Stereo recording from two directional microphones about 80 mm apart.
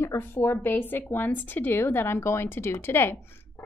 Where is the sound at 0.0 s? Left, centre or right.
Left.